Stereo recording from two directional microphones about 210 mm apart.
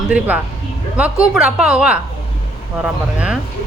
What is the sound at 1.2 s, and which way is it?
Speech, 5° right (ahead or behind).